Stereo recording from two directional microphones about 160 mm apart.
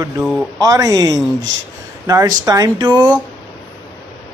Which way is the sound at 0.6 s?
20° right (ahead or behind).